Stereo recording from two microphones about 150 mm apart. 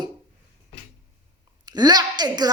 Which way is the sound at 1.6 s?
25° right (ahead or behind).